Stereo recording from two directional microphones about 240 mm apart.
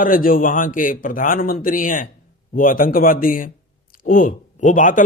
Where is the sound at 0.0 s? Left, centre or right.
Left.